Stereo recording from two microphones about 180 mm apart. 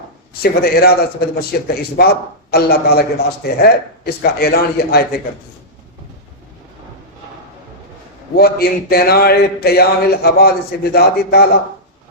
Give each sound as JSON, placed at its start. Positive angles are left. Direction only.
{"t": 0.4, "sound": "a man's voice", "side_deg": 60}
{"t": 8.4, "sound": "a man's voice", "side_deg": 60}